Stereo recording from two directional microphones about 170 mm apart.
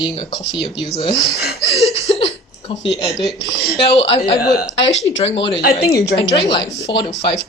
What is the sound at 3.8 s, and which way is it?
Speech, 35° left (ahead or behind).